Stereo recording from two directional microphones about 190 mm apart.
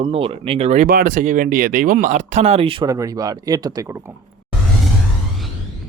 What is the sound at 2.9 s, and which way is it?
Speech, 20° right (ahead or behind).